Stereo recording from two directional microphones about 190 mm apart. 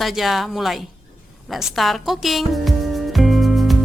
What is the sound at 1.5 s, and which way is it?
Music, centre (ahead or behind).